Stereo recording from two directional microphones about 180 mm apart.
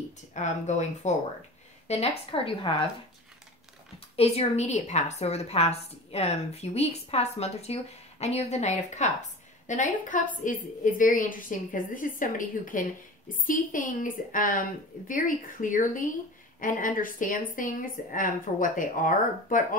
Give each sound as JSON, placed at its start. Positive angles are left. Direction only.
{"t": 0.3, "sound": "a woman's voice", "side_deg": 40}
{"t": 4.2, "sound": "a woman's voice", "side_deg": 35}